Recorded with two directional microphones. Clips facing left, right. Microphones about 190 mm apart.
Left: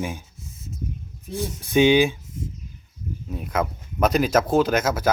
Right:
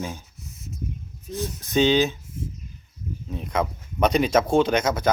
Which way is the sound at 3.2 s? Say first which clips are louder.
Even; 5° left (ahead or behind).